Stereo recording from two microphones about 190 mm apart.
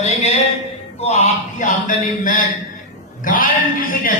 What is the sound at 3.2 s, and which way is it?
Speech, 45° left (ahead or behind).